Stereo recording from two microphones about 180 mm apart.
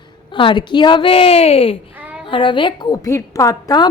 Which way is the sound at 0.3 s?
25° left (ahead or behind).